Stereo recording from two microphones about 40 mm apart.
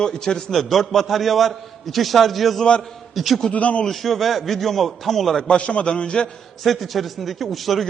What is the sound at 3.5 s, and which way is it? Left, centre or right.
Speech, left.